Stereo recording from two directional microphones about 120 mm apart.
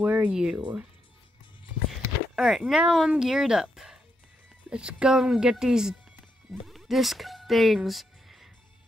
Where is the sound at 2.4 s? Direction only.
Centre (ahead or behind).